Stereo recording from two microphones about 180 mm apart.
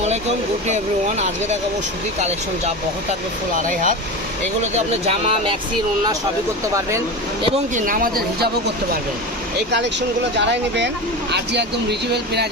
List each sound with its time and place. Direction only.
0.7 s speech: 40° right (ahead or behind)
3.6 s speech: 45° right (ahead or behind)
5.0 s speech: 35° right (ahead or behind)
7.7 s speech: 45° right (ahead or behind)
10.3 s speech: 75° right (ahead or behind)